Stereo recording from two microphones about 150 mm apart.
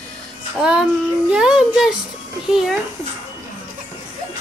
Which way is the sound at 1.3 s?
5° right (ahead or behind).